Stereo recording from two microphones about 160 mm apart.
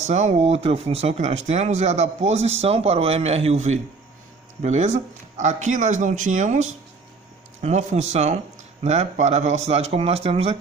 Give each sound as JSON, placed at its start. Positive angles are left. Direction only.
{"t": 0.1, "sound": "speech", "side_deg": -45}